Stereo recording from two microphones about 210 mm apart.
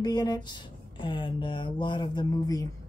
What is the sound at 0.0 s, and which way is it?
Speech, 20° left (ahead or behind).